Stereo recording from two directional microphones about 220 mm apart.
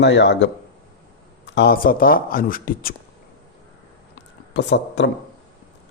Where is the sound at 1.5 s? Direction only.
45° left (ahead or behind).